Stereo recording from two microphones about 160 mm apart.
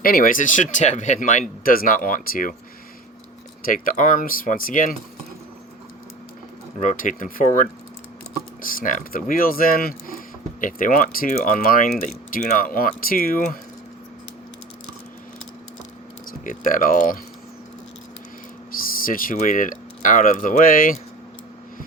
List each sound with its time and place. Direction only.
0.0 s speech: 65° left (ahead or behind)
3.6 s speech: 60° left (ahead or behind)
6.7 s speech: 55° left (ahead or behind)
16.4 s speech: 55° left (ahead or behind)
19.0 s speech: 60° left (ahead or behind)